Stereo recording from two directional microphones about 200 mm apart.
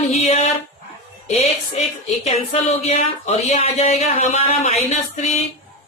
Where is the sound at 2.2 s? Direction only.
30° left (ahead or behind).